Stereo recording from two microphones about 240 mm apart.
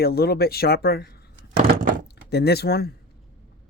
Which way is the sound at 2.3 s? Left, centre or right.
Left.